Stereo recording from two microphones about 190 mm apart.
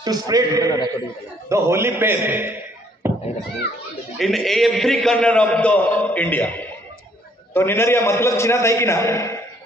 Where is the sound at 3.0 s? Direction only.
10° right (ahead or behind).